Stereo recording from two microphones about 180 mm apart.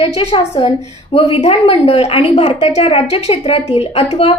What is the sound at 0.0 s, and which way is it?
A woman's voice, 35° left (ahead or behind).